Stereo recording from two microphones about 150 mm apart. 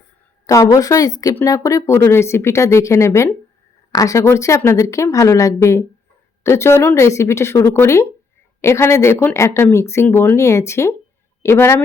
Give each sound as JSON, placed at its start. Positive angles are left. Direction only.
{"t": 0.4, "sound": "speech", "side_deg": 20}